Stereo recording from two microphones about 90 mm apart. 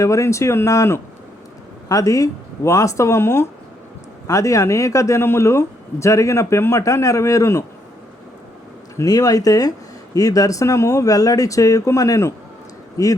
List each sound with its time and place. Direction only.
0.0 s speech: 35° left (ahead or behind)
9.0 s speech: 45° left (ahead or behind)